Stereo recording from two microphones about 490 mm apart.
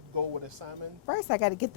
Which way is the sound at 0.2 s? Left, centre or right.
Right.